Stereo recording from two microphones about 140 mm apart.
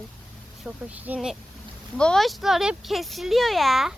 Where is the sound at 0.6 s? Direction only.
10° right (ahead or behind).